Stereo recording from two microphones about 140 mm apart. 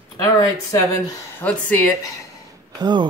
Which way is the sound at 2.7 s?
30° right (ahead or behind).